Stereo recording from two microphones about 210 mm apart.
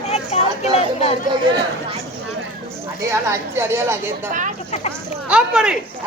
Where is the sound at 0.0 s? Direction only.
30° left (ahead or behind).